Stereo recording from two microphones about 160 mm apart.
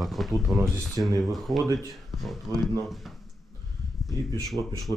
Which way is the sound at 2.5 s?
20° right (ahead or behind).